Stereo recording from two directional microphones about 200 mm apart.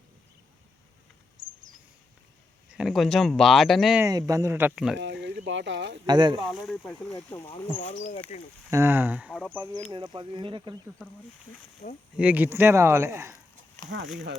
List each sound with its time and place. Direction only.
2.6 s speech: 5° right (ahead or behind)
4.3 s speech: 15° right (ahead or behind)
4.9 s speech: 60° right (ahead or behind)
6.1 s speech: 20° right (ahead or behind)
6.5 s speech: centre (ahead or behind)
7.8 s speech: 35° left (ahead or behind)
8.7 s speech: 10° right (ahead or behind)
9.9 s speech: 25° right (ahead or behind)
11.8 s speech: 45° left (ahead or behind)
12.1 s speech: 5° right (ahead or behind)
13.9 s speech: 65° right (ahead or behind)